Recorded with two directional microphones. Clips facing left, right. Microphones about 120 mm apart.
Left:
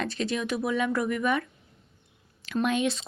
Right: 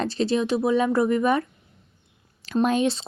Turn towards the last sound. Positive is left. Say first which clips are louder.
# right 5 dB
turn(degrees=-35)  # may be behind; listen again after turning